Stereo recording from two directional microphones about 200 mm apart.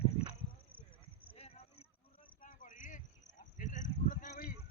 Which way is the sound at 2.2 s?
40° left (ahead or behind).